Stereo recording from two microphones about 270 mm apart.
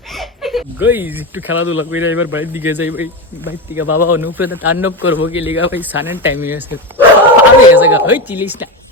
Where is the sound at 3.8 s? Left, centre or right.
Left.